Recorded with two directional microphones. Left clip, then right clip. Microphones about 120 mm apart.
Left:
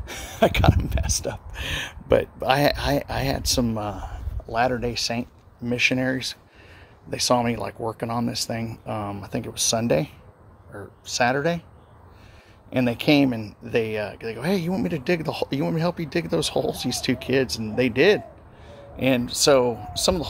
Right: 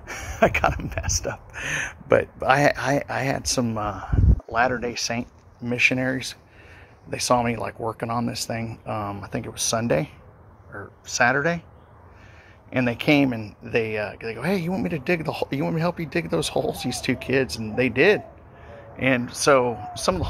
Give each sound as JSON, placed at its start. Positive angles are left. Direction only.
{"t": 0.0, "sound": "speech", "side_deg": 25}
{"t": 12.6, "sound": "speech", "side_deg": 40}